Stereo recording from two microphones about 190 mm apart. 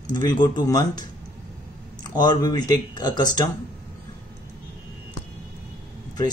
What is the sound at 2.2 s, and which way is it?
Speech, 20° left (ahead or behind).